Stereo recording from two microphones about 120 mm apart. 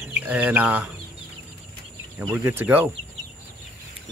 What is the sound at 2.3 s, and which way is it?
Speech, 15° right (ahead or behind).